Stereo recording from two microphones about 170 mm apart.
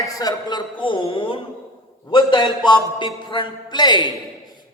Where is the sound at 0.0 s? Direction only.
20° left (ahead or behind).